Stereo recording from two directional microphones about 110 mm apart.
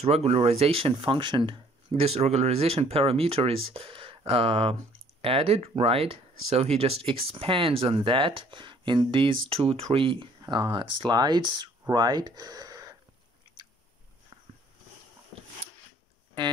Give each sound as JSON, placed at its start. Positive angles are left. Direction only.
{"t": 0.0, "sound": "speech", "side_deg": -70}
{"t": 2.0, "sound": "speech", "side_deg": -80}